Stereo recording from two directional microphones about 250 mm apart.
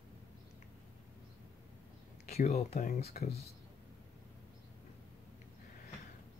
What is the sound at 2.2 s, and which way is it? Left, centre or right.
Speech, left.